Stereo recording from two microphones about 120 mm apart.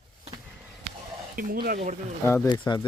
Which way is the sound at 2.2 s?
25° left (ahead or behind).